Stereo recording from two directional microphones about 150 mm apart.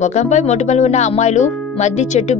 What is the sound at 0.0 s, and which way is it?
Speech, 50° left (ahead or behind).